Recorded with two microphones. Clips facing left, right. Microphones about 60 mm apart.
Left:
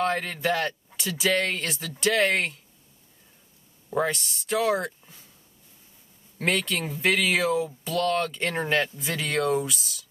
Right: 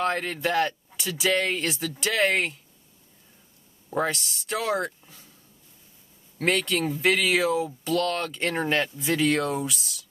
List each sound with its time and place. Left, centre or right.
0.0 s speech: centre
0.7 s a sound: centre
1.0 s speech: centre
1.8 s speech: centre
3.9 s speech: centre
6.3 s speech: centre
7.8 s speech: centre